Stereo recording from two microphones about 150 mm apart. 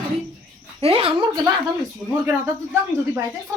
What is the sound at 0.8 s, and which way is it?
Speech, 40° right (ahead or behind).